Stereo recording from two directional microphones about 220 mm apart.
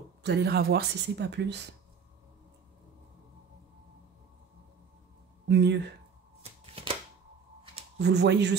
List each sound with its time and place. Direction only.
0.2 s speech: 50° right (ahead or behind)
5.5 s speech: 50° right (ahead or behind)
6.4 s shuffling cards: 25° right (ahead or behind)
8.0 s speech: 50° right (ahead or behind)